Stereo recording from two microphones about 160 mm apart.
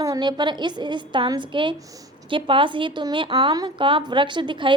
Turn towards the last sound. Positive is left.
turn(degrees=-30)  # may be behind; listen again after turning